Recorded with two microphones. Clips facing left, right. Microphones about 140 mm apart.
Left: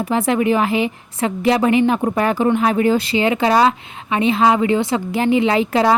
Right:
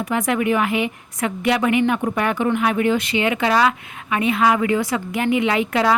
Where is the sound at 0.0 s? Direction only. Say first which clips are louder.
Left 3 dB; 30° left (ahead or behind).